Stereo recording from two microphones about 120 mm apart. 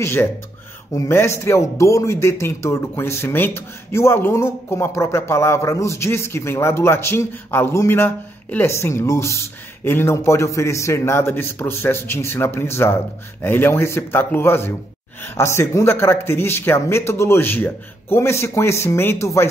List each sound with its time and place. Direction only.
0.0 s speech: 20° left (ahead or behind)